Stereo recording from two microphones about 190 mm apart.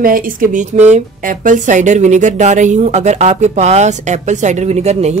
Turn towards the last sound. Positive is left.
turn(degrees=-35)  # may be behind; listen again after turning